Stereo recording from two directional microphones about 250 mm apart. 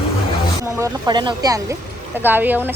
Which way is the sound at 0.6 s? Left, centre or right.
Centre.